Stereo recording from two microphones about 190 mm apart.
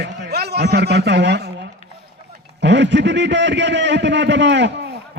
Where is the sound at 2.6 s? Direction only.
70° right (ahead or behind).